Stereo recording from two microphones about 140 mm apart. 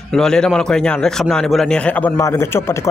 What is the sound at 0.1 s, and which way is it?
A man's voice, 5° left (ahead or behind).